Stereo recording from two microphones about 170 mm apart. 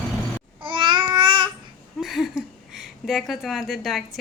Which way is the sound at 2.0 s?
Centre (ahead or behind).